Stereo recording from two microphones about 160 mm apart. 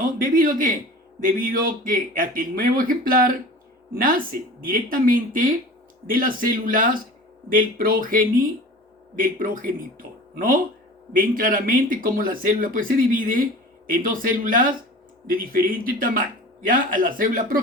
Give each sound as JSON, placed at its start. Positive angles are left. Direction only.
{"t": 0.0, "sound": "a man's voice", "side_deg": -60}